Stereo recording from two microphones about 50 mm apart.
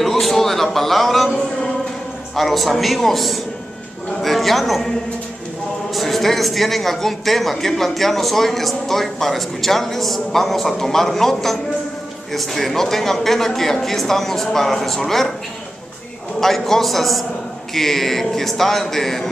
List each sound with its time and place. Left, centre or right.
0.0 s a man's voice: centre
5.9 s speech: centre
16.3 s speech: centre